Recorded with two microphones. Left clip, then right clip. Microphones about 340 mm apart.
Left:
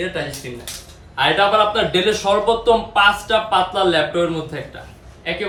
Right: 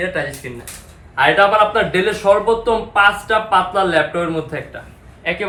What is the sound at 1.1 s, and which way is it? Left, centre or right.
Speech, centre.